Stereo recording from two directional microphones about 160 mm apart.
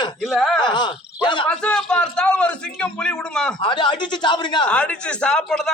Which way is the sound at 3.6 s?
30° left (ahead or behind).